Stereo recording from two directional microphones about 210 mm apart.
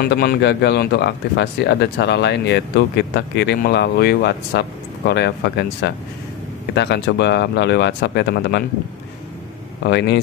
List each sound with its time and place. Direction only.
0.0 s speech: 45° left (ahead or behind)
9.8 s speech: 55° left (ahead or behind)